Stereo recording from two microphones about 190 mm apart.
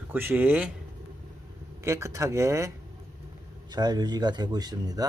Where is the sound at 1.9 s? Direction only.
15° right (ahead or behind).